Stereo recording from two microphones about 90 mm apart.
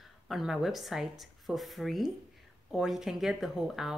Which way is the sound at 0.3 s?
5° right (ahead or behind).